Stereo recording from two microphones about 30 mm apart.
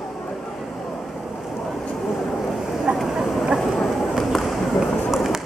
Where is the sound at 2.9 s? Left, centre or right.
Right.